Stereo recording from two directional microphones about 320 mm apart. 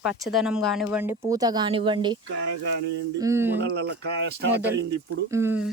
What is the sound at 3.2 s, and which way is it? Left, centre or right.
Speech, centre.